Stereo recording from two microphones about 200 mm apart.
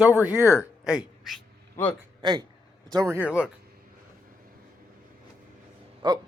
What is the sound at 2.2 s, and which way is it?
A man's voice, 20° right (ahead or behind).